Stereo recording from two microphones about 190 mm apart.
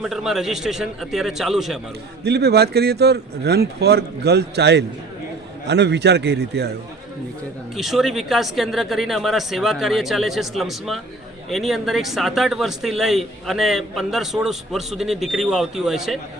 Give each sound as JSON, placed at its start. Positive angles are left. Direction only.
{"t": 0.0, "sound": "speech", "side_deg": 0}
{"t": 2.2, "sound": "speech", "side_deg": -60}
{"t": 7.8, "sound": "speech", "side_deg": 0}